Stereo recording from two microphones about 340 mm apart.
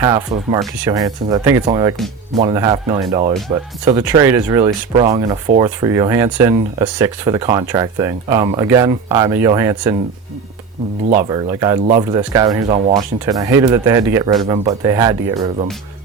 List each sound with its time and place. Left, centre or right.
0.0 s speech: centre
11.2 s speech: centre